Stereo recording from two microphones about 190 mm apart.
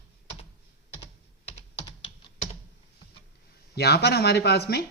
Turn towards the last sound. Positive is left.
turn(degrees=55)  # may be behind; listen again after turning